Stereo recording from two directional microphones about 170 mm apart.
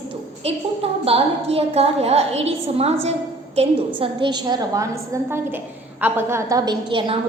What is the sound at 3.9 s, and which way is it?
A woman's voice, 30° right (ahead or behind).